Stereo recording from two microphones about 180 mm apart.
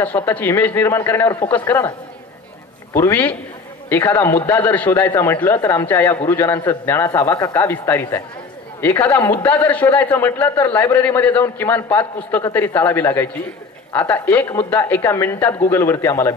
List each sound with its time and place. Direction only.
0.0 s a man's voice: 10° left (ahead or behind)
2.9 s a man's voice: 10° left (ahead or behind)